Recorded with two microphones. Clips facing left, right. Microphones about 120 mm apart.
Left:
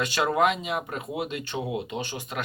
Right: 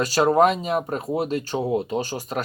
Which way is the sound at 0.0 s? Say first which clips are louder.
Right 6 dB; 40° right (ahead or behind).